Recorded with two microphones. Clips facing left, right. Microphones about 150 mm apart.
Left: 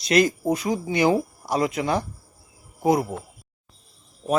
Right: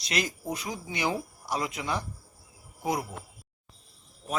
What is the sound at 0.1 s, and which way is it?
Speech, 55° left (ahead or behind).